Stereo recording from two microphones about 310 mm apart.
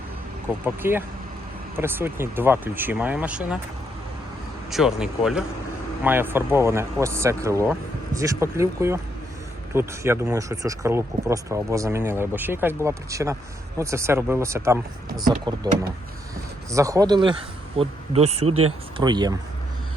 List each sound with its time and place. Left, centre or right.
0.6 s speech: centre
4.7 s speech: centre
16.7 s speech: centre
18.4 s speech: right
18.9 s speech: centre